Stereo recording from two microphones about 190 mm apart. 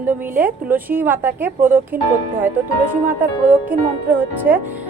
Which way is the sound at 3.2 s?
10° right (ahead or behind).